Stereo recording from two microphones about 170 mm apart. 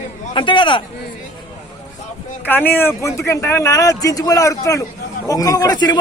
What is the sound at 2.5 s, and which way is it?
Speech, 10° left (ahead or behind).